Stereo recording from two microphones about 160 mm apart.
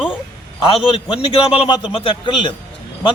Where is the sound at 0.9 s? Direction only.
35° left (ahead or behind).